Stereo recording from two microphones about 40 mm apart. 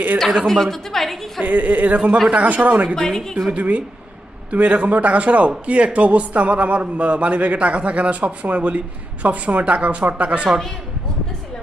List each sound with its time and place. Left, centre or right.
0.4 s a woman's voice: centre
1.4 s speech: right
3.0 s a woman's voice: centre
3.5 s speech: right